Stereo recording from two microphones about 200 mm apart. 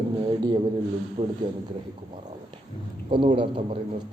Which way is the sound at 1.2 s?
25° right (ahead or behind).